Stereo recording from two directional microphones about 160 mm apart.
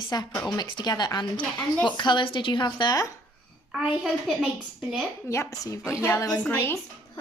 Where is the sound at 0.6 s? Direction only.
25° left (ahead or behind).